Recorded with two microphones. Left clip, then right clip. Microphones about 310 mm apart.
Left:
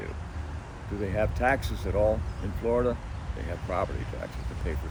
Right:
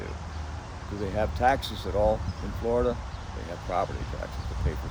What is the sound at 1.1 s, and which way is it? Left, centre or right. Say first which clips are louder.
Speech: right 2 dB; centre.